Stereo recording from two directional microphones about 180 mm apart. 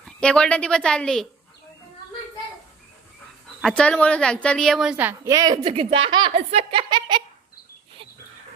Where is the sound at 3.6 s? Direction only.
5° left (ahead or behind); by 5.7 s 20° right (ahead or behind).